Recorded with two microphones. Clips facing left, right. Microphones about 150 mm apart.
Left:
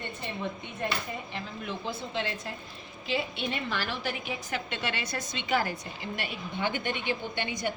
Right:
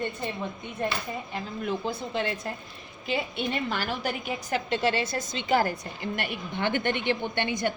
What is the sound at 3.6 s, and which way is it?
A woman's voice, 45° right (ahead or behind).